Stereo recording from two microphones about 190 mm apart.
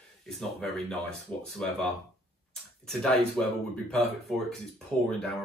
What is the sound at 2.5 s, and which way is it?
Speech, 5° left (ahead or behind).